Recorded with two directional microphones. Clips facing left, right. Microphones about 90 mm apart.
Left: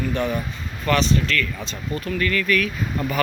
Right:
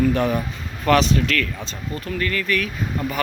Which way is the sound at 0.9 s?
70° right (ahead or behind).